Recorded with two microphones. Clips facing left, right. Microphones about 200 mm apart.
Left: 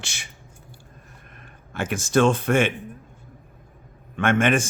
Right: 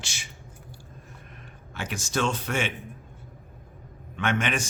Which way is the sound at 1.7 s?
50° left (ahead or behind).